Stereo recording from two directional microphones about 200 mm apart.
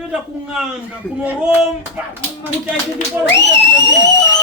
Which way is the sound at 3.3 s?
60° left (ahead or behind).